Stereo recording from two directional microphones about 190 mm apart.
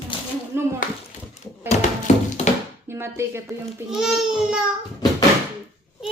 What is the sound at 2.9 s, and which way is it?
Speech, 15° right (ahead or behind).